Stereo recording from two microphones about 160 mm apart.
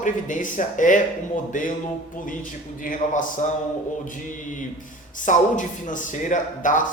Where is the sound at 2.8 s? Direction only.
55° left (ahead or behind).